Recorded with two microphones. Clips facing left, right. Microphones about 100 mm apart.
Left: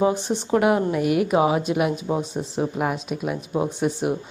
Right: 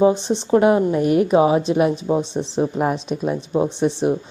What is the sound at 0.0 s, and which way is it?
A woman's voice, 20° right (ahead or behind).